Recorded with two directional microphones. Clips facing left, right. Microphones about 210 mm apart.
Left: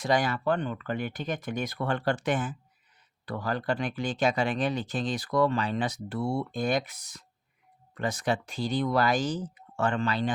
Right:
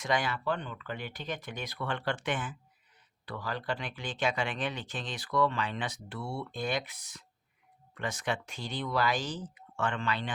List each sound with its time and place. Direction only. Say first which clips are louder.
0.0 s speech: left 5 dB; 40° left (ahead or behind)